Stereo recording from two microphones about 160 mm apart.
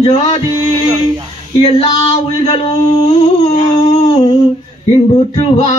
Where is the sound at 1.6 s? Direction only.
35° left (ahead or behind).